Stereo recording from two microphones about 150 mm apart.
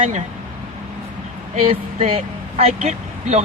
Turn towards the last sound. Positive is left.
turn(degrees=-50)  # may be behind; listen again after turning